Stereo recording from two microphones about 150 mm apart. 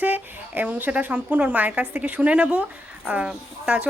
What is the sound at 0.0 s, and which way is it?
A woman's voice, 10° right (ahead or behind).